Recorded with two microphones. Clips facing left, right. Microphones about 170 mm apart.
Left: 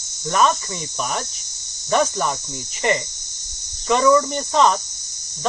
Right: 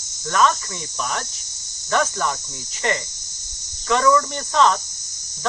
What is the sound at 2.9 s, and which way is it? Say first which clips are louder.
Speech: left 3 dB; 15° left (ahead or behind).